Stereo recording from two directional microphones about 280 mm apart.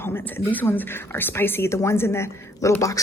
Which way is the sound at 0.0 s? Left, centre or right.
Centre.